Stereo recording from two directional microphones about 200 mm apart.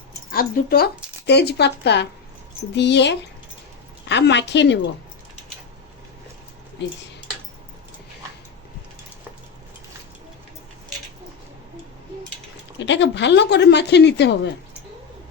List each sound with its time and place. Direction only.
0.3 s a woman's voice: 50° left (ahead or behind)
12.8 s a woman's voice: 60° left (ahead or behind)